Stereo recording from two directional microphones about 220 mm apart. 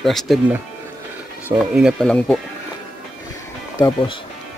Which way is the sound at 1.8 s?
Centre (ahead or behind).